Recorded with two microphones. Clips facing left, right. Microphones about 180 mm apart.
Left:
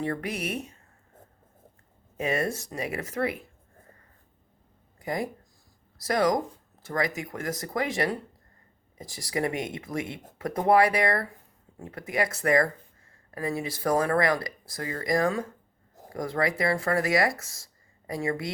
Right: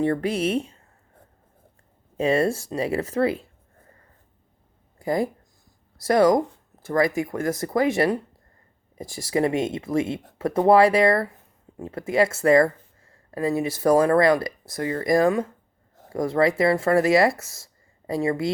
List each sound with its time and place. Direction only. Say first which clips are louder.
0.0 s speech: right 8 dB; 30° right (ahead or behind)
2.1 s speech: right 7 dB; 30° right (ahead or behind)
4.9 s speech: right 7 dB; 30° right (ahead or behind)